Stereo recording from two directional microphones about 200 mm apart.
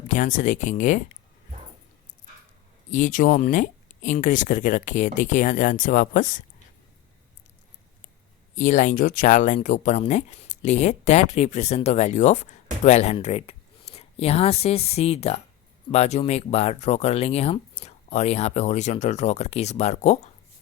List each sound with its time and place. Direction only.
0.1 s speech: 40° left (ahead or behind)
2.9 s speech: 40° left (ahead or behind)
8.5 s speech: 40° left (ahead or behind)